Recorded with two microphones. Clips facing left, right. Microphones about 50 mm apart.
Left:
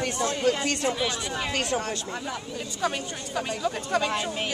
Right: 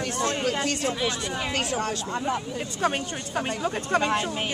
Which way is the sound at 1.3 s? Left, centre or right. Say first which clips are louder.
Even; centre.